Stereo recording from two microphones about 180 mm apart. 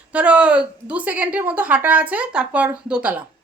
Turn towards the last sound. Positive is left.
turn(degrees=-5)  # may be behind; listen again after turning